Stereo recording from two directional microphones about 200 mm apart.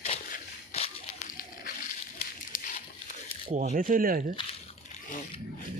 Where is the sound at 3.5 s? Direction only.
40° right (ahead or behind).